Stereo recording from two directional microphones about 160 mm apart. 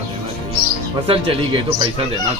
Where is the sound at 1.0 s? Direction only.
35° right (ahead or behind).